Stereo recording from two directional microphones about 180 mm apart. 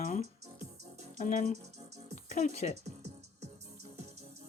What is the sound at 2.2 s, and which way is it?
Speech, 40° left (ahead or behind).